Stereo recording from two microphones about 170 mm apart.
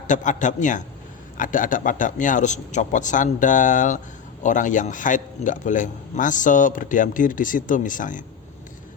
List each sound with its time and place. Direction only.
0.1 s a man's voice: 45° left (ahead or behind)